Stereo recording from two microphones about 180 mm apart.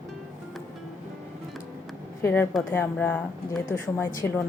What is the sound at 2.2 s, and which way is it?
Speech, 10° left (ahead or behind).